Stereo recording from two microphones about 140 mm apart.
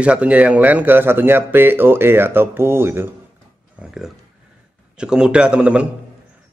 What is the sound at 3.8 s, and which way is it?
A man's voice, 5° right (ahead or behind).